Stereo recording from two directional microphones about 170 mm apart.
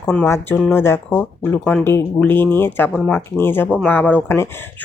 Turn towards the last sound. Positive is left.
turn(degrees=10)  # may be behind; listen again after turning